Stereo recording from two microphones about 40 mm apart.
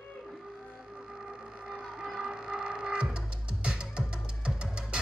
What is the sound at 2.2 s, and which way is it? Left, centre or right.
Music, centre.